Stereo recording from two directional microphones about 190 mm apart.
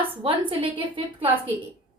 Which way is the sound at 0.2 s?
30° right (ahead or behind).